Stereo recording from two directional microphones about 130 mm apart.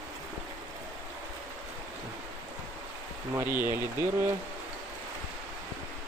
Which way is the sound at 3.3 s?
15° right (ahead or behind).